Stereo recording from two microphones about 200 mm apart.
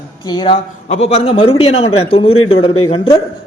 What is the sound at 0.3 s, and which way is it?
A man's voice, 20° left (ahead or behind).